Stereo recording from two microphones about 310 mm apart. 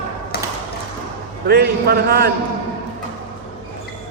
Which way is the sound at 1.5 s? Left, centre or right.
Right.